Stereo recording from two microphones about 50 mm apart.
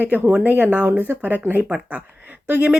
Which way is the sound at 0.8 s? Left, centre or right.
Right.